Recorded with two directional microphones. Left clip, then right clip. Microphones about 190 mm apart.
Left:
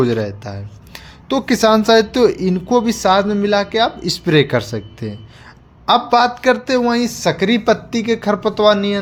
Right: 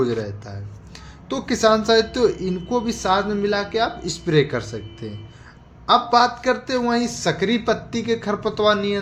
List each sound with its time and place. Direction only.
0.0 s speech: 50° left (ahead or behind)